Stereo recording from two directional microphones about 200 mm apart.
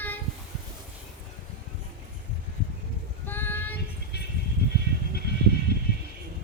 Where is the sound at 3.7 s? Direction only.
55° left (ahead or behind).